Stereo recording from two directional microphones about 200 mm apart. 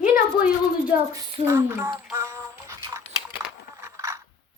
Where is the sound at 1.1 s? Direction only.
15° right (ahead or behind).